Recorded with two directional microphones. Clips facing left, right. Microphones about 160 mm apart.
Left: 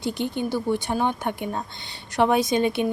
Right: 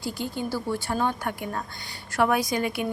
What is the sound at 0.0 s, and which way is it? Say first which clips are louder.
Speech: left 4 dB; 20° left (ahead or behind).